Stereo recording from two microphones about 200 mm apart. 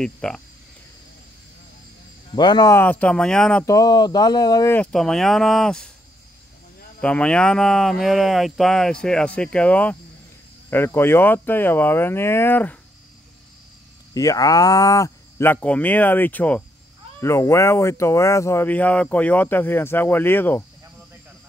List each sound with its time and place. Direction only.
0.0 s speech: 5° left (ahead or behind)
2.3 s speech: 20° left (ahead or behind); by 3.6 s 5° left (ahead or behind)
3.6 s speech: 20° left (ahead or behind)
4.9 s speech: centre (ahead or behind)
7.0 s speech: 5° left (ahead or behind)
14.1 s speech: 15° left (ahead or behind)